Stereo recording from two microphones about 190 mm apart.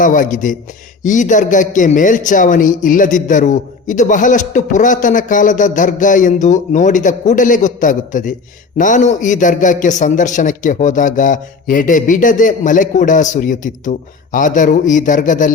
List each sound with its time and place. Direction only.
0.0 s a man's voice: 45° left (ahead or behind)